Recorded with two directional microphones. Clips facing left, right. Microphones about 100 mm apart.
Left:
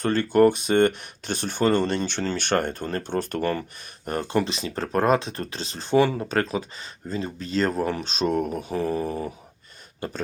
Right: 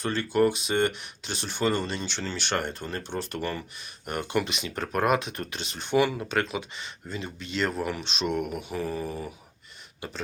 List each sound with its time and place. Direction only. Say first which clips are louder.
0.0 s speech: left 6 dB; 50° left (ahead or behind)
4.0 s speech: left 4 dB; 35° left (ahead or behind)